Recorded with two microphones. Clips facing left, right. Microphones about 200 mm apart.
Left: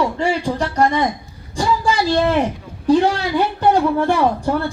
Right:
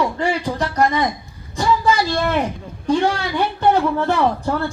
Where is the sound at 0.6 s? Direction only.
30° left (ahead or behind).